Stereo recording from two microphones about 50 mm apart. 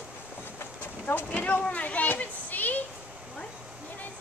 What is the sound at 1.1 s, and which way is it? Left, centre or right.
Speech, left.